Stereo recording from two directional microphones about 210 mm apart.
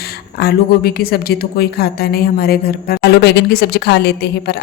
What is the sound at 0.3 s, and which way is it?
A woman's voice, 50° left (ahead or behind).